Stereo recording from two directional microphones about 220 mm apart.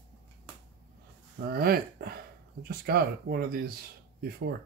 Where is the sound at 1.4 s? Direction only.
45° right (ahead or behind).